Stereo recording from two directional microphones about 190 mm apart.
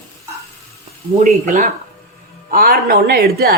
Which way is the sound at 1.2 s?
45° right (ahead or behind).